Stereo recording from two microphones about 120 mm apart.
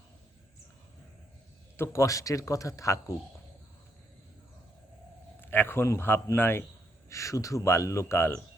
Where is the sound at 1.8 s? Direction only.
25° left (ahead or behind).